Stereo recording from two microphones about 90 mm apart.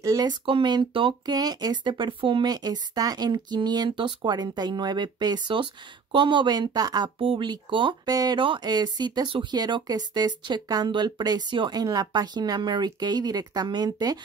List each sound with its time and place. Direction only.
0.5 s speech: 70° right (ahead or behind)
1.2 s speech: 45° right (ahead or behind); by 2.4 s 70° right (ahead or behind)
2.4 s speech: 50° right (ahead or behind)
7.2 s speech: 70° right (ahead or behind)
7.5 s speech: 60° right (ahead or behind)
8.1 s speech: 45° right (ahead or behind)
8.4 s speech: 65° right (ahead or behind)
8.6 s speech: 50° right (ahead or behind)